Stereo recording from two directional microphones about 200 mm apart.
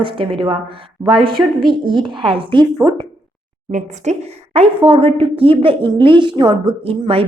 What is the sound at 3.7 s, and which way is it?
Speech, 35° right (ahead or behind).